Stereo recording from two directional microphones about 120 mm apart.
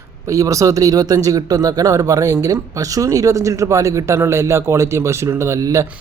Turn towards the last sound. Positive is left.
turn(degrees=-25)  # may be behind; listen again after turning